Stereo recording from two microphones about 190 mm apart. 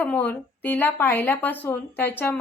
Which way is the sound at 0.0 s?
10° left (ahead or behind).